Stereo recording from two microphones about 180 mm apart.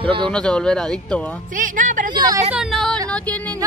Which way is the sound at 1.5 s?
45° right (ahead or behind).